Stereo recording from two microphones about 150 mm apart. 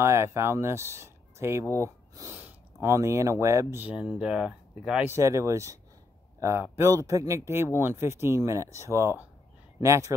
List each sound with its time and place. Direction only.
0.0 s speech: 20° right (ahead or behind)
5.1 s speech: 20° right (ahead or behind)